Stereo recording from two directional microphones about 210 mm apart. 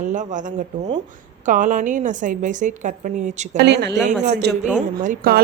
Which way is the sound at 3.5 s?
55° right (ahead or behind).